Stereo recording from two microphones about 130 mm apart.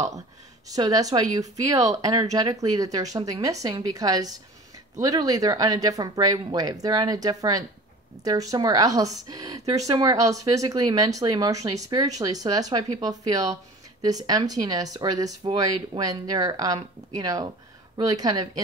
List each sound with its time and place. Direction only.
0.7 s speech: 30° right (ahead or behind)